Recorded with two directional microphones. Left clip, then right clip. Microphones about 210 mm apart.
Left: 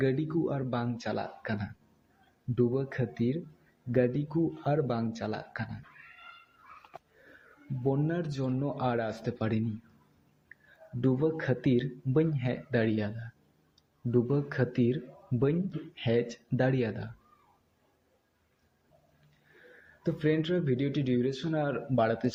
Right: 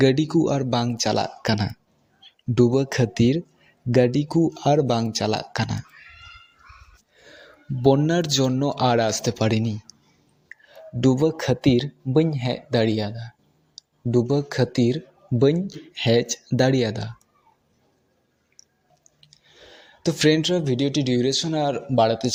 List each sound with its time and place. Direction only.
0.0 s speech: 40° right (ahead or behind)
7.9 s speech: 45° right (ahead or behind)
11.0 s speech: 35° right (ahead or behind)
20.0 s speech: 35° right (ahead or behind)